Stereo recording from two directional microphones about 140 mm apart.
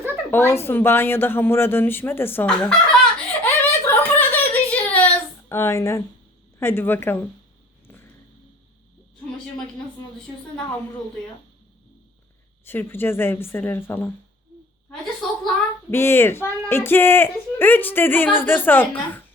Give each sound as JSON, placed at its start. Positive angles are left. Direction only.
{"t": 0.3, "sound": "speech", "side_deg": 15}
{"t": 2.6, "sound": "laughter", "side_deg": 5}
{"t": 6.6, "sound": "speech", "side_deg": 15}
{"t": 12.6, "sound": "speech", "side_deg": 15}
{"t": 15.2, "sound": "a sound", "side_deg": 5}
{"t": 15.9, "sound": "speech", "side_deg": 15}